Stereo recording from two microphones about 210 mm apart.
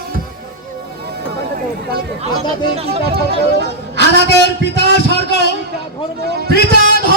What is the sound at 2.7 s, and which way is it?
Speech, 30° right (ahead or behind).